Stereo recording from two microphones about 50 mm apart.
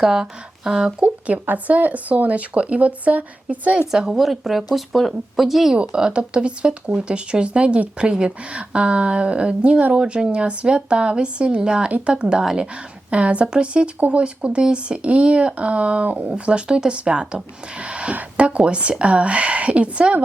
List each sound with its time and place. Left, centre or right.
0.0 s speech: centre
1.0 s speech: right
3.9 s speech: centre
5.7 s speech: centre
11.9 s speech: right
12.1 s speech: centre